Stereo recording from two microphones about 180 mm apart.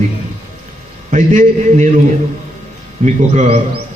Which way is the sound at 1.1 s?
45° right (ahead or behind).